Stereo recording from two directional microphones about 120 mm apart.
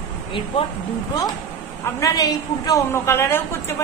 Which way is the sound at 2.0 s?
30° left (ahead or behind).